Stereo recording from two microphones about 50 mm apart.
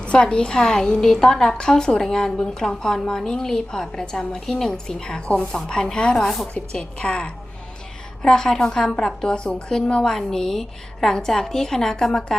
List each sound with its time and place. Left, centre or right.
0.0 s a woman's voice: left
6.2 s a woman's voice: centre
6.7 s a woman's voice: centre